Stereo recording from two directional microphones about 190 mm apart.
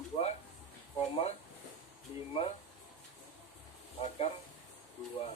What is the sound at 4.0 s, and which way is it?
Speech, 30° left (ahead or behind).